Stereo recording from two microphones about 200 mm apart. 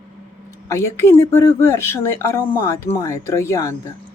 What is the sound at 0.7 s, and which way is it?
Speech, 15° left (ahead or behind).